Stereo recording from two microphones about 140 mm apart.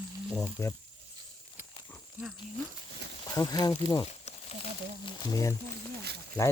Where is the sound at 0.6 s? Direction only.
20° left (ahead or behind).